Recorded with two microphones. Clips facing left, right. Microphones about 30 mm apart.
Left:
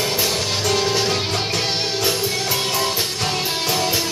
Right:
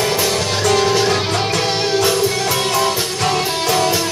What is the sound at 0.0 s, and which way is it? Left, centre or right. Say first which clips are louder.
Music: right 4 dB; centre.